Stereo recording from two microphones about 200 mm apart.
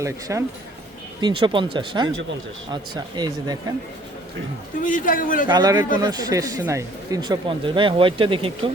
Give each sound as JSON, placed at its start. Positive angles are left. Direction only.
{"t": 0.0, "sound": "speech", "side_deg": -15}
{"t": 4.8, "sound": "speech", "side_deg": 40}
{"t": 5.5, "sound": "speech", "side_deg": -20}